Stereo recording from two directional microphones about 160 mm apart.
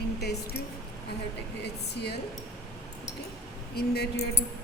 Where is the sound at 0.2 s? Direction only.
90° left.